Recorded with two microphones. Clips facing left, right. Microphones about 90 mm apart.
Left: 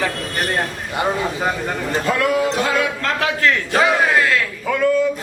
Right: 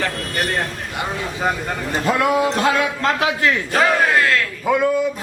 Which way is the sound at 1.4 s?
Centre (ahead or behind).